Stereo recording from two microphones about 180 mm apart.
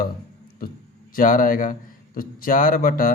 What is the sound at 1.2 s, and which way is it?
Speech, 50° left (ahead or behind).